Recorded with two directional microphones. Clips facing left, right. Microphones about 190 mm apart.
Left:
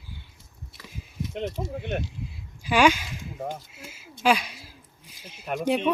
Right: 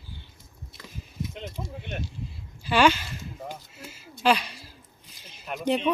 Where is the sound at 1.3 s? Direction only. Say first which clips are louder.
Left 8 dB; 50° left (ahead or behind).